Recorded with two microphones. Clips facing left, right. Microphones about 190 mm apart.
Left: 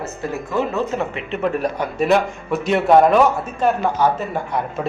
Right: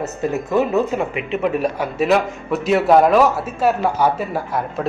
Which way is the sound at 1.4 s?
5° right (ahead or behind).